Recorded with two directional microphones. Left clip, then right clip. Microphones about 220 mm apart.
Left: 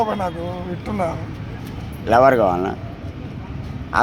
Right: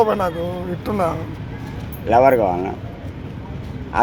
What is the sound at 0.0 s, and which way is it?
Speech, 45° right (ahead or behind).